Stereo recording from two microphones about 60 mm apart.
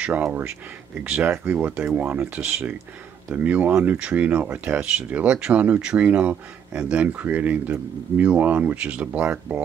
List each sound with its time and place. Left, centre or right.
0.0 s speech: right